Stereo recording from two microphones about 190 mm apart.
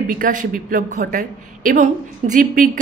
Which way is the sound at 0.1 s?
45° right (ahead or behind).